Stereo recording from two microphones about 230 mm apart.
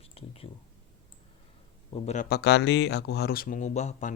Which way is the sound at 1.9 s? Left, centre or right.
Left.